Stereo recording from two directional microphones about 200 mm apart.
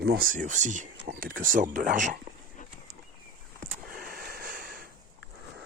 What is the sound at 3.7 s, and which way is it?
Sniff, 45° right (ahead or behind).